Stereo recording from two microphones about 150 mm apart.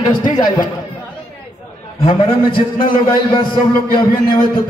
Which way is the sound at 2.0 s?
30° left (ahead or behind).